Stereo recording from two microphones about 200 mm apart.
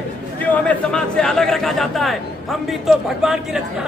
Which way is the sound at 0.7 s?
5° left (ahead or behind).